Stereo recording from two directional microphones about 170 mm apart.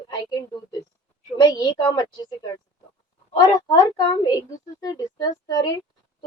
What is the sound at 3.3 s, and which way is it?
A woman's voice, 25° left (ahead or behind).